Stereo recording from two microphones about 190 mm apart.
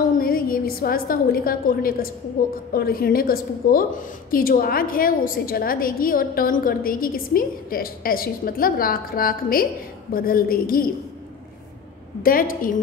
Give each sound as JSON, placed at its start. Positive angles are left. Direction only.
{"t": 0.2, "sound": "a woman's voice", "side_deg": 50}
{"t": 12.2, "sound": "a woman's voice", "side_deg": 50}